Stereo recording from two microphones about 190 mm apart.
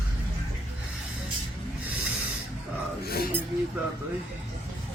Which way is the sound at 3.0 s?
50° left (ahead or behind).